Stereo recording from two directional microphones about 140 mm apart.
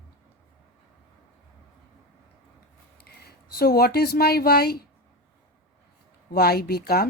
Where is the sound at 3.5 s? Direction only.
90° left.